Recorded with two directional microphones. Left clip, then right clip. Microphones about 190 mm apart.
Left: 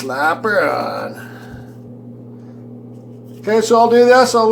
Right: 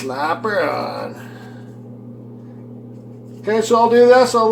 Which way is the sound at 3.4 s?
25° left (ahead or behind).